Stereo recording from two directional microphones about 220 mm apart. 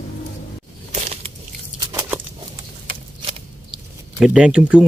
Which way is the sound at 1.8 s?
15° right (ahead or behind).